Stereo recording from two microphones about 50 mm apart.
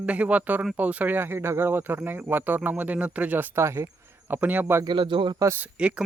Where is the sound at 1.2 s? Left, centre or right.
Right.